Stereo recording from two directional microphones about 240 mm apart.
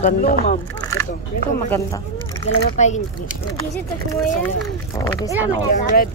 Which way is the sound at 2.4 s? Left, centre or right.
Left.